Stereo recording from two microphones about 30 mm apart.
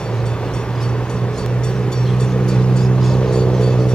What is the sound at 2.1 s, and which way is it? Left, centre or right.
Vehicle, left.